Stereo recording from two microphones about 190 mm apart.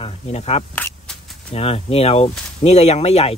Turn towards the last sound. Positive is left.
turn(degrees=35)  # may be behind; listen again after turning